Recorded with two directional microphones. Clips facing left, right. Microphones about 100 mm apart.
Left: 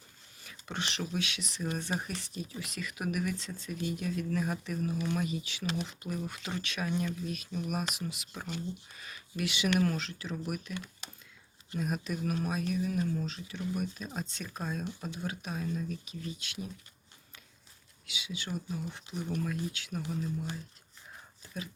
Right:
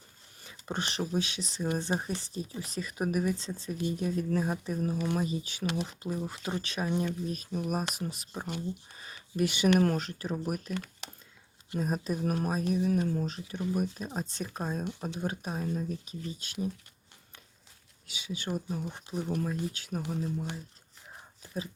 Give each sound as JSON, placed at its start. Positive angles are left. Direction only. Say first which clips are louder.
{"t": 0.6, "sound": "speech", "louder": "right 3 dB", "side_deg": -40}
{"t": 6.6, "sound": "speech", "louder": "right 2 dB", "side_deg": -35}
{"t": 9.0, "sound": "a sound", "louder": "right 1 dB", "side_deg": -30}
{"t": 9.3, "sound": "speech", "louder": "right 5 dB", "side_deg": -45}
{"t": 18.0, "sound": "speech", "louder": "right 3 dB", "side_deg": -45}